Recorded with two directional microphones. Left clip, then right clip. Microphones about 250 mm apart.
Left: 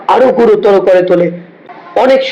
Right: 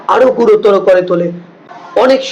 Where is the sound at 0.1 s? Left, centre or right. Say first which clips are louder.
Left 1 dB; centre.